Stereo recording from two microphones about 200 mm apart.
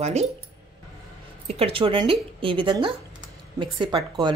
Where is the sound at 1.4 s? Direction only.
30° right (ahead or behind).